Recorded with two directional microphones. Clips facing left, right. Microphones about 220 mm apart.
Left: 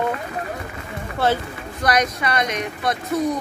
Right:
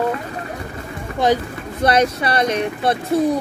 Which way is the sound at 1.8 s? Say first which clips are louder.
Right 4 dB; 30° right (ahead or behind).